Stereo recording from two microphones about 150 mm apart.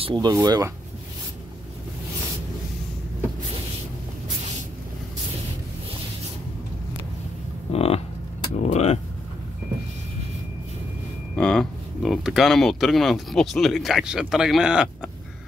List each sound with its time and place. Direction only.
0.0 s speech: 30° right (ahead or behind)
7.7 s cattle: 40° left (ahead or behind)
8.6 s vehicle: 45° left (ahead or behind)
11.3 s speech: 5° left (ahead or behind)